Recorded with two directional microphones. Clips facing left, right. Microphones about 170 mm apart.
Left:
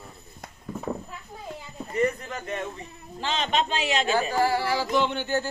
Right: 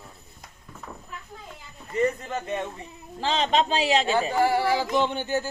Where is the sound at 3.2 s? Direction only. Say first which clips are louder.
Right 3 dB; 30° right (ahead or behind).